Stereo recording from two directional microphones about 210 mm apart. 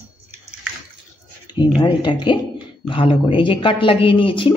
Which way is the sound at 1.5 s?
20° left (ahead or behind).